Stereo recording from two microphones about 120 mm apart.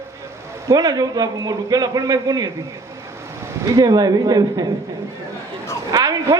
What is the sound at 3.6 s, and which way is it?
A man's voice, 30° right (ahead or behind).